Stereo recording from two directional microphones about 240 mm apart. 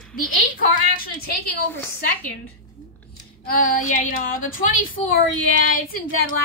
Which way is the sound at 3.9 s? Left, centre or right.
Left.